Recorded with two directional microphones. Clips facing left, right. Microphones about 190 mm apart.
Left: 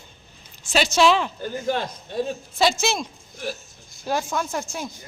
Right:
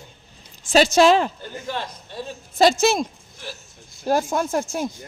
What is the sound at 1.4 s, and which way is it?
Speech, 45° left (ahead or behind).